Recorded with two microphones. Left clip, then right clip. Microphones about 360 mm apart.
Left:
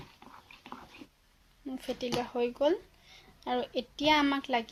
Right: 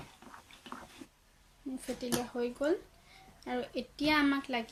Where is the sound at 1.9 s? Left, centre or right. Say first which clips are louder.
Left 4 dB; centre.